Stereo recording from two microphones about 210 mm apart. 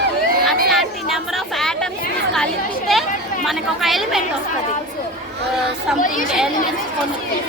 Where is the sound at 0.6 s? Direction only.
Centre (ahead or behind).